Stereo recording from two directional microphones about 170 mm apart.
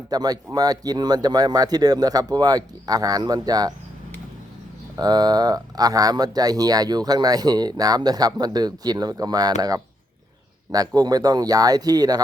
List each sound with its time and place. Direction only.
0.1 s speech: 20° right (ahead or behind)
4.9 s speech: 25° right (ahead or behind)